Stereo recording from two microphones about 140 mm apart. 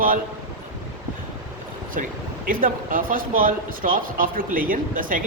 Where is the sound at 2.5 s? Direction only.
85° right.